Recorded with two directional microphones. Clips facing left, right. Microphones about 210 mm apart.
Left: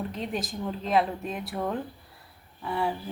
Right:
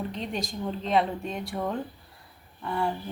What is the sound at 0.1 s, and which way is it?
Speech, centre (ahead or behind).